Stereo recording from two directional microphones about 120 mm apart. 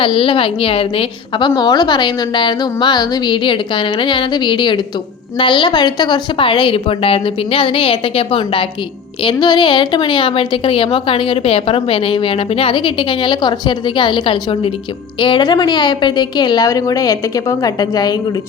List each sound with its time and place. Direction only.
0.0 s a woman's voice: 50° left (ahead or behind); by 18.1 s 35° left (ahead or behind)